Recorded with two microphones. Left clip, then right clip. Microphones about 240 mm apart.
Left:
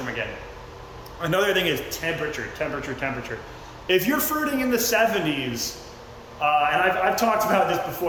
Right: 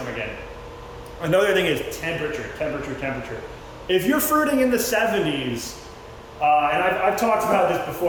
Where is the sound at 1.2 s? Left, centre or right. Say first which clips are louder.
Right 3 dB; centre.